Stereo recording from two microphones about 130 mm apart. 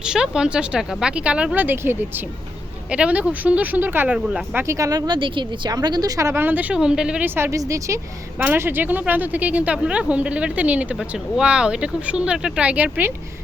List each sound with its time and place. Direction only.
0.0 s speech: 5° right (ahead or behind)
4.6 s speech: 25° right (ahead or behind)